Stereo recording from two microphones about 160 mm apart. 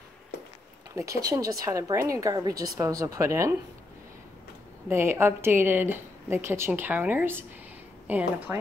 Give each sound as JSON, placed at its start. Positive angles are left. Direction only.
{"t": 0.9, "sound": "speech", "side_deg": -20}
{"t": 4.8, "sound": "speech", "side_deg": -15}